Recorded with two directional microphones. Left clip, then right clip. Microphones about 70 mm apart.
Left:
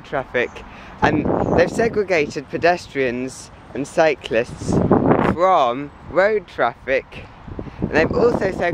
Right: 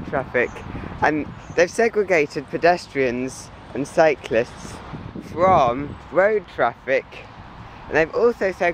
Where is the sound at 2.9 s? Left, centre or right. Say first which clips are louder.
Even; left.